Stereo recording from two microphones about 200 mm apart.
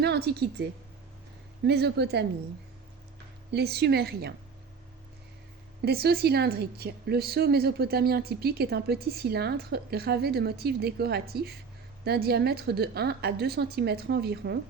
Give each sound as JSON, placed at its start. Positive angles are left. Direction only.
{"t": 0.0, "sound": "a woman's voice", "side_deg": -55}
{"t": 3.5, "sound": "a woman's voice", "side_deg": -55}
{"t": 5.8, "sound": "a woman's voice", "side_deg": -50}